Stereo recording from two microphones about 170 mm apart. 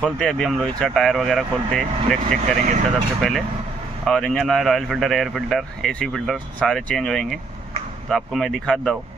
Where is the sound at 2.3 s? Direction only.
45° right (ahead or behind).